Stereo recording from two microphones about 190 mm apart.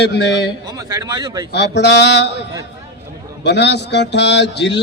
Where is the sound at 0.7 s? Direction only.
20° right (ahead or behind).